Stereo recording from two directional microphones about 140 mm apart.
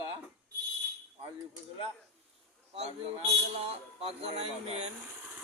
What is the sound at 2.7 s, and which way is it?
Speech, 45° right (ahead or behind).